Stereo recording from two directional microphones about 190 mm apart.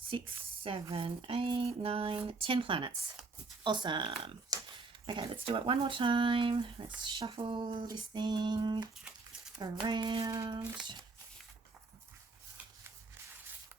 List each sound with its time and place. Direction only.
0.6 s speech: 30° right (ahead or behind)
4.3 s computer keyboard: 20° right (ahead or behind)
5.0 s speech: 25° right (ahead or behind)